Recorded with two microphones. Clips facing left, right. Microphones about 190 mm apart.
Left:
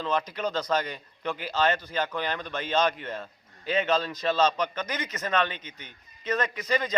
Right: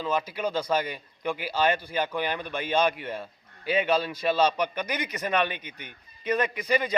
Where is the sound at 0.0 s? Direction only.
10° right (ahead or behind).